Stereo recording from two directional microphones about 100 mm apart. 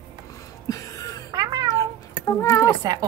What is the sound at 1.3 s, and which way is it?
Cat, 40° right (ahead or behind).